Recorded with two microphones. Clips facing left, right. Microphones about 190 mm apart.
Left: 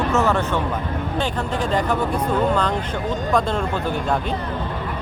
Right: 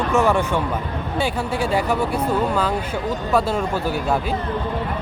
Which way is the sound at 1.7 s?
10° right (ahead or behind).